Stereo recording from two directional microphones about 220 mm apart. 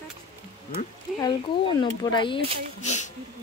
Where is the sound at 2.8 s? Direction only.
30° left (ahead or behind).